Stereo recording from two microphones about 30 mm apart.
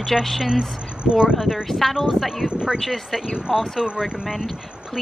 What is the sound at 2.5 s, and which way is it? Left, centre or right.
Speech, right.